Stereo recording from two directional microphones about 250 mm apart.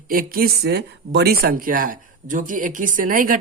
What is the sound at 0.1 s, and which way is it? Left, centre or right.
Speech, right.